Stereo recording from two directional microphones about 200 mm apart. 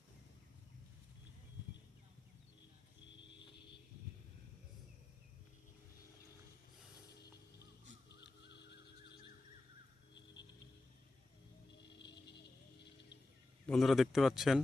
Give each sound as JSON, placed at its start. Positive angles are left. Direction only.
{"t": 8.1, "sound": "a sound", "side_deg": 60}
{"t": 11.8, "sound": "music", "side_deg": 60}
{"t": 13.7, "sound": "speech", "side_deg": 0}